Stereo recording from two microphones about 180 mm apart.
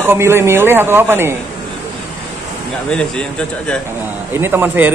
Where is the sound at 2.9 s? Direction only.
5° left (ahead or behind).